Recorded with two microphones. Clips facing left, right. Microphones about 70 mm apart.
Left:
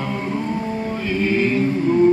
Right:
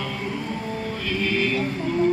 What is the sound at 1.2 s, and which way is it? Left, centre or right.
Chant, left.